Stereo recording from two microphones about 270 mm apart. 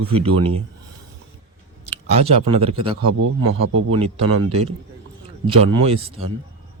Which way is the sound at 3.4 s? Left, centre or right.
Right.